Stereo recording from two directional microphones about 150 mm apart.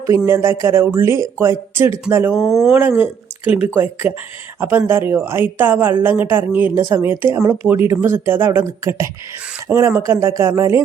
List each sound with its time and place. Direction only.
0.3 s speech: 15° right (ahead or behind)
2.3 s speech: 5° right (ahead or behind)
2.7 s speech: 15° right (ahead or behind)